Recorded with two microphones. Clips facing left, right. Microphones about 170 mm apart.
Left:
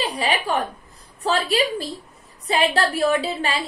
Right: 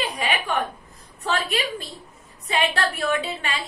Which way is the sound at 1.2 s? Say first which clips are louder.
Left 5 dB; 35° left (ahead or behind).